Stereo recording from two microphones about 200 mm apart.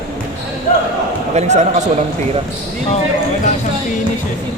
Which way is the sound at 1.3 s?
35° right (ahead or behind).